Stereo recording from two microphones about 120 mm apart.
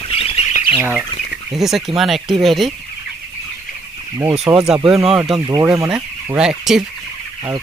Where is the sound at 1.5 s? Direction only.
5° right (ahead or behind).